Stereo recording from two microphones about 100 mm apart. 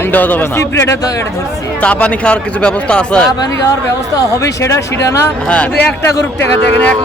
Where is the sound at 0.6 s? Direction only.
35° left (ahead or behind).